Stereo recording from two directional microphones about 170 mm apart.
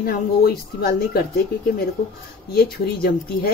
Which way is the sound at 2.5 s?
65° left (ahead or behind).